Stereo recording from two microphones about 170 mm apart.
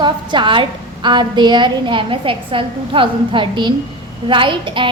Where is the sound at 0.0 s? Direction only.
30° right (ahead or behind).